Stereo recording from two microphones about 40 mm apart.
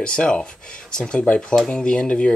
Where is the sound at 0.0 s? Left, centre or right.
Left.